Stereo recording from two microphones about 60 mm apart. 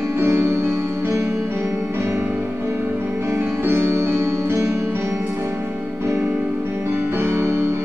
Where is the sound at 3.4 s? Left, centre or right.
Right.